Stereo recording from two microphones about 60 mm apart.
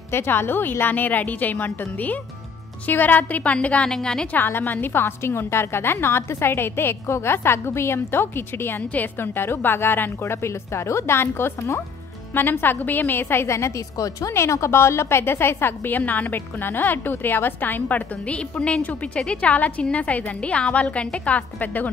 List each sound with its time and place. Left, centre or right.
0.1 s a woman's voice: left
3.9 s a woman's voice: centre
4.3 s a woman's voice: left
13.9 s speech: left
14.3 s a woman's voice: left